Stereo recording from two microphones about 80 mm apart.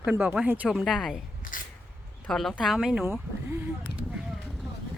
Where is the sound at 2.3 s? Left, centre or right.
Centre.